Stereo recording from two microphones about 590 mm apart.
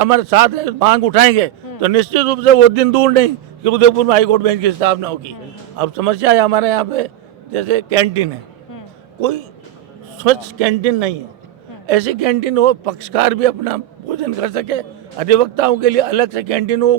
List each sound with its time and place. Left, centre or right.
0.0 s a man's voice: right
5.8 s a man's voice: right
10.2 s a man's voice: right